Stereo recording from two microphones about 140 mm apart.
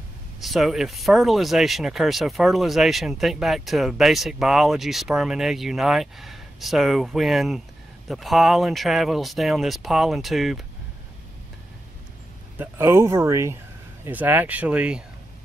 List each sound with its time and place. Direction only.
0.4 s speech: centre (ahead or behind)
12.5 s speech: 15° right (ahead or behind)